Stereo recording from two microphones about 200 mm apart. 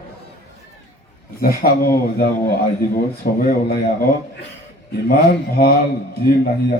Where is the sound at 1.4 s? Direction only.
50° left (ahead or behind).